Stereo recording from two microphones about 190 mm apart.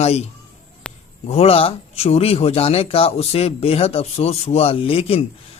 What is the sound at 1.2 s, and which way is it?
Speech, 30° left (ahead or behind).